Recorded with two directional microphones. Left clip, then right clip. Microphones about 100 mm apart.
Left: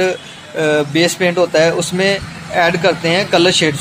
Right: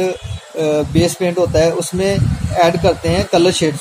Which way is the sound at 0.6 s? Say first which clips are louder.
Left 2 dB; 15° right (ahead or behind).